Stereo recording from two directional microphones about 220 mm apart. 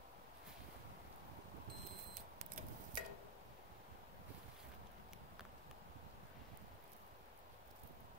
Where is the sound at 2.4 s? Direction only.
35° right (ahead or behind).